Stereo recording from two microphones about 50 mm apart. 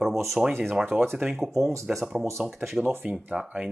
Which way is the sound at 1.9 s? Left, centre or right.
Centre.